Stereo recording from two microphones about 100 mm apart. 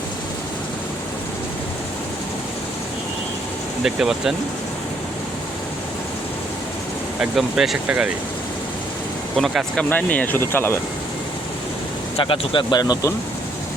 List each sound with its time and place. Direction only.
3.8 s speech: 5° right (ahead or behind)
7.2 s speech: 5° right (ahead or behind)
9.3 s speech: centre (ahead or behind)
9.9 s speech: 15° left (ahead or behind)
12.1 s speech: 65° left (ahead or behind)
12.7 s speech: 40° left (ahead or behind)